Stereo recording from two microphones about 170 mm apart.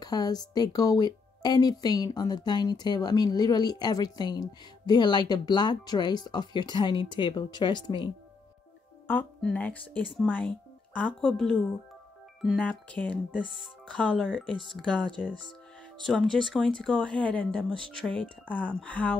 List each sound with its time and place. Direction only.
0.0 s a woman's voice: 25° left (ahead or behind)
9.0 s speech: 10° left (ahead or behind)